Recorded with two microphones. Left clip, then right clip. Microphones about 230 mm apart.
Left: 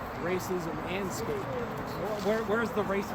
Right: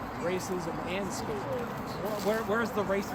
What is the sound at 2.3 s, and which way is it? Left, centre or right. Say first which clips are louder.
Speech: even; centre.